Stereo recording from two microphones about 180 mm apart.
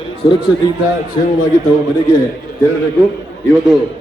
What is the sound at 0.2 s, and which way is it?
Speech, 25° left (ahead or behind).